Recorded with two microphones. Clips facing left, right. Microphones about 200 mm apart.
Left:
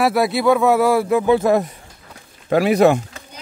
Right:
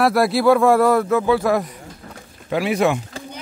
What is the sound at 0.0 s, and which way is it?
Speech, centre (ahead or behind).